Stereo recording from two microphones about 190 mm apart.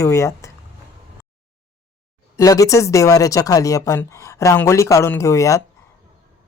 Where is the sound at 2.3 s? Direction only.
15° left (ahead or behind).